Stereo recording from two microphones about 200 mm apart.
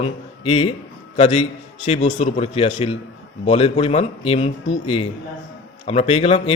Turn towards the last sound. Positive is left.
turn(degrees=30)  # may be behind; listen again after turning